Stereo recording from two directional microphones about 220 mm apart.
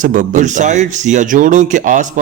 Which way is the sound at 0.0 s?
35° right (ahead or behind).